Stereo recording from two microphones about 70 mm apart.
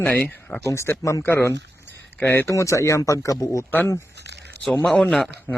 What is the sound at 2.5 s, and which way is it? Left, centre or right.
Speech, left.